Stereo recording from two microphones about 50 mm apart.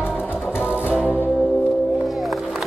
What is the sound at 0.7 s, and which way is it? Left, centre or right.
Music, right.